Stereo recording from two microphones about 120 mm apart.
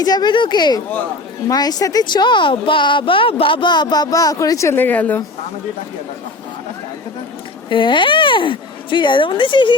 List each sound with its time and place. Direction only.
0.0 s a woman's voice: 35° left (ahead or behind); by 5.2 s 15° left (ahead or behind)
7.7 s speech: 45° left (ahead or behind)